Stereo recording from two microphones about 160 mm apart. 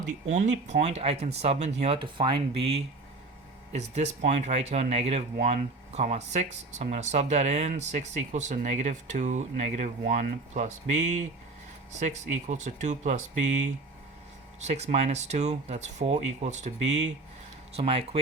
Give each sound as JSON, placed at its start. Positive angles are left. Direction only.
{"t": 0.3, "sound": "speech", "side_deg": -50}
{"t": 3.7, "sound": "speech", "side_deg": -45}